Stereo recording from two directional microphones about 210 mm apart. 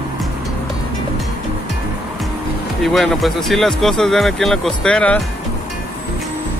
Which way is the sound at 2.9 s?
Centre (ahead or behind).